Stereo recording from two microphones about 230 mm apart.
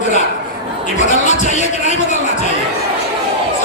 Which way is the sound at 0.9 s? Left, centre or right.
Left.